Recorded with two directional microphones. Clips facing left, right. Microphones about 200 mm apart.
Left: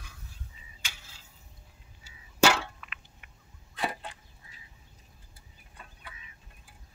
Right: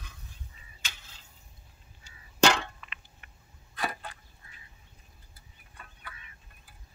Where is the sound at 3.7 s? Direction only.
25° left (ahead or behind).